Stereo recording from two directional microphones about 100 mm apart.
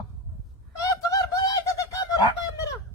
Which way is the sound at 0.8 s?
35° left (ahead or behind).